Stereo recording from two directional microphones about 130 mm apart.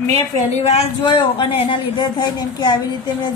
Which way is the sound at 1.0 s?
40° left (ahead or behind).